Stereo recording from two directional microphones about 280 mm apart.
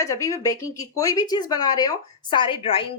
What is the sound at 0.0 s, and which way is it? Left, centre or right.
Speech, centre.